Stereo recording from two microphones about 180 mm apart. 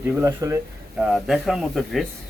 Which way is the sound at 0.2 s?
15° right (ahead or behind).